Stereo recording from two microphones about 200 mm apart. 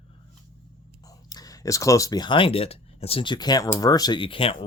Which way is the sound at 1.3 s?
20° left (ahead or behind).